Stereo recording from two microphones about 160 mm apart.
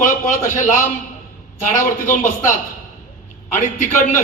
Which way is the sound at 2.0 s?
55° left (ahead or behind).